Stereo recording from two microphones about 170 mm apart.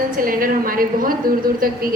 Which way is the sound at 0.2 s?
55° right (ahead or behind).